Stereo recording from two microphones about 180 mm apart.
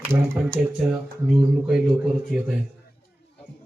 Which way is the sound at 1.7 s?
Centre (ahead or behind).